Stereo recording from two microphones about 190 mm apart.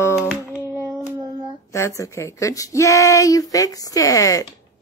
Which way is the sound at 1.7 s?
15° left (ahead or behind).